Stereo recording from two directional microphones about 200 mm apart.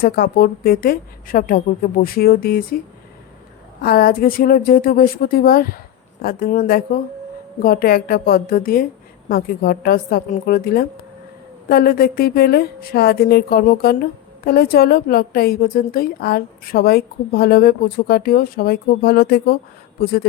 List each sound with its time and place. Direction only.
0.0 s speech: 50° left (ahead or behind)